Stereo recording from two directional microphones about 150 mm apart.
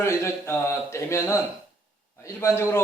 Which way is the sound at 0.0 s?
15° left (ahead or behind).